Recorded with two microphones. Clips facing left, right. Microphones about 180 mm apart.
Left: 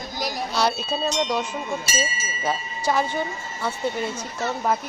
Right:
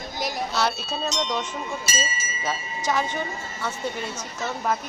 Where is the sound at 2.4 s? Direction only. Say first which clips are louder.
Left 3 dB; 10° left (ahead or behind).